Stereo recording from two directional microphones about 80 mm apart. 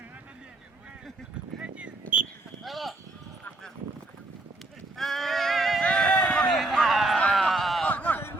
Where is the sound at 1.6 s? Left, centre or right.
Centre.